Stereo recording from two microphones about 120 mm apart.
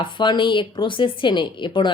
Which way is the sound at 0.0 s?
40° left (ahead or behind).